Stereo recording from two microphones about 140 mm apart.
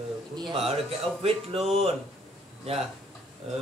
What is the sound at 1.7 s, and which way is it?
Speech, 45° right (ahead or behind).